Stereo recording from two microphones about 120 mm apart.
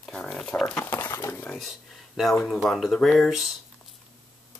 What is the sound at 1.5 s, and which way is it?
Speech, centre (ahead or behind).